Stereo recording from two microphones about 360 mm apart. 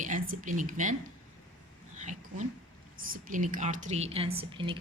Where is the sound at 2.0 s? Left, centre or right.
Centre.